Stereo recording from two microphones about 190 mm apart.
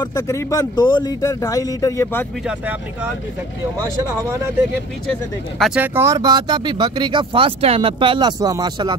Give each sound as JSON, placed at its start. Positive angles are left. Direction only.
{"t": 0.0, "sound": "speech", "side_deg": 15}
{"t": 2.4, "sound": "speech", "side_deg": -5}
{"t": 5.8, "sound": "speech", "side_deg": -15}